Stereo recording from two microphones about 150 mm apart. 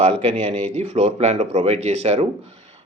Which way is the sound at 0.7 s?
45° right (ahead or behind).